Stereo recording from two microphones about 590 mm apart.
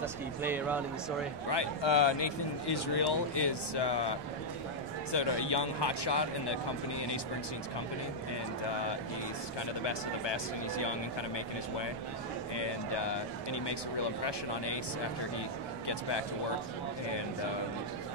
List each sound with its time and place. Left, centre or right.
0.0 s speech: centre
1.5 s speech: left
5.1 s speech: left
9.8 s speech: left